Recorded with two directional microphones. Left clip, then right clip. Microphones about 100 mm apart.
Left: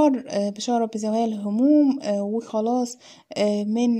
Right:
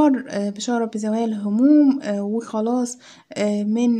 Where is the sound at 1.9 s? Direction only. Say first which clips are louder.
Even; 45° left (ahead or behind).